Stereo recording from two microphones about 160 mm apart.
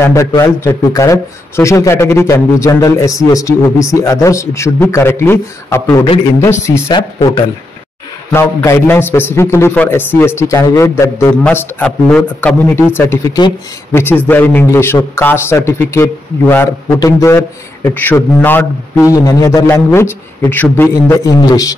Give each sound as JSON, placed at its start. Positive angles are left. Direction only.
{"t": 0.0, "sound": "a man's voice", "side_deg": 20}
{"t": 8.3, "sound": "a man's voice", "side_deg": 15}
{"t": 11.4, "sound": "a man's voice", "side_deg": 5}